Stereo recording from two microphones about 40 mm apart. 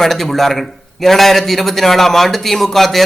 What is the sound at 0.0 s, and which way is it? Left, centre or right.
Speech, centre.